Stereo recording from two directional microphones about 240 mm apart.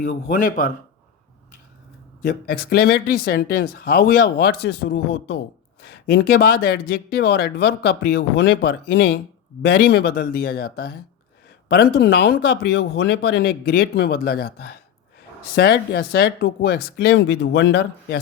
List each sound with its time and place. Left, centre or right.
0.0 s speech: left
2.2 s speech: left
15.5 s speech: left